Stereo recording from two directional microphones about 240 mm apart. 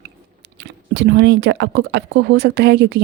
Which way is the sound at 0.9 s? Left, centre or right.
Right.